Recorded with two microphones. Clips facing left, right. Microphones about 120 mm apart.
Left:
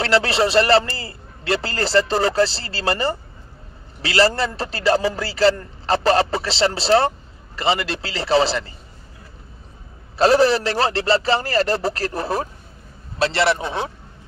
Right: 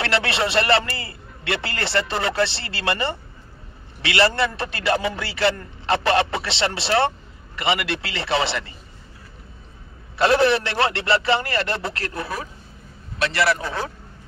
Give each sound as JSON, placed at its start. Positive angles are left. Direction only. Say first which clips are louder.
{"t": 0.0, "sound": "a man's voice", "louder": "left 5 dB", "side_deg": 35}
{"t": 10.1, "sound": "a man's voice", "louder": "left 2 dB", "side_deg": 35}